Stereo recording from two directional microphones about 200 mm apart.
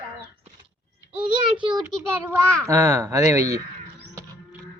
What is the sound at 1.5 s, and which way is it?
A child's voice, 25° right (ahead or behind).